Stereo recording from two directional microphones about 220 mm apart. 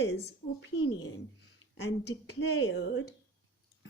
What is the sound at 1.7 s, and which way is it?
Speech, 55° left (ahead or behind).